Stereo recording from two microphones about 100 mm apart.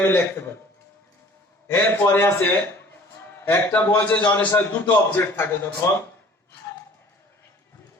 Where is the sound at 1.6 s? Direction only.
25° left (ahead or behind).